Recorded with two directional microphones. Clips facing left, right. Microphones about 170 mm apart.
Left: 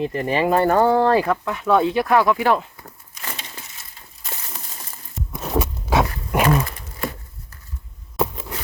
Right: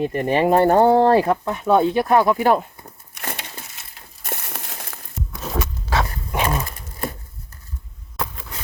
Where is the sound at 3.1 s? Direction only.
65° right (ahead or behind).